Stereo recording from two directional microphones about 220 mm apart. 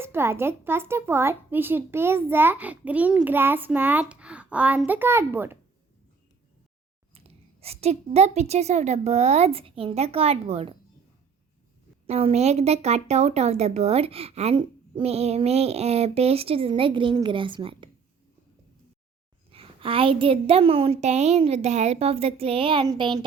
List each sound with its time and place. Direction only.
0.0 s a child's voice: 10° right (ahead or behind)
7.1 s speech: 25° right (ahead or behind)
12.0 s speech: 30° right (ahead or behind)
19.5 s speech: 25° right (ahead or behind)